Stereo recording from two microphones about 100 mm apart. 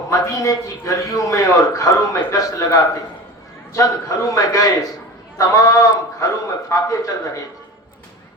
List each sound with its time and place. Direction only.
0.1 s a man's voice: 35° left (ahead or behind)